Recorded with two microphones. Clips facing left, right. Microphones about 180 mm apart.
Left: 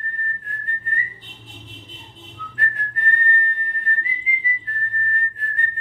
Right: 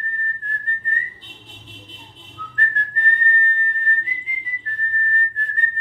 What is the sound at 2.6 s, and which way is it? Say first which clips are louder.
Whistling: right 2 dB; 10° left (ahead or behind).